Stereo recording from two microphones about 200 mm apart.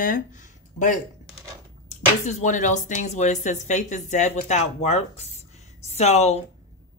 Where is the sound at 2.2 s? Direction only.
40° left (ahead or behind).